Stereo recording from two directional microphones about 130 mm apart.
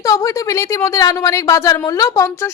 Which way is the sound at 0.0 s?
25° left (ahead or behind).